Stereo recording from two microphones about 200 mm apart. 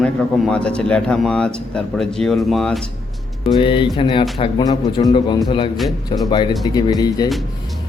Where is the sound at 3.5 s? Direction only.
25° left (ahead or behind).